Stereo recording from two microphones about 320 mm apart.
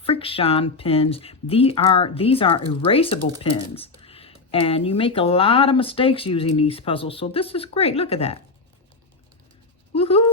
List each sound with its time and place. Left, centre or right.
0.0 s speech: centre
9.9 s speech: centre